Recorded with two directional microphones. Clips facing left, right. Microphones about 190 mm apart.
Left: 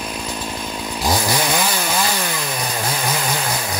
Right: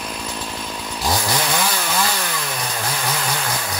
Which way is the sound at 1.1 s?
15° left (ahead or behind).